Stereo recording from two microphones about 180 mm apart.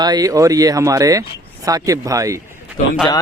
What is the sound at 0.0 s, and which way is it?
Speech, 20° right (ahead or behind).